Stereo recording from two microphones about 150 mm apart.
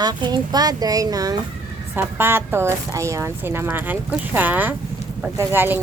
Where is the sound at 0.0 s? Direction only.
30° right (ahead or behind).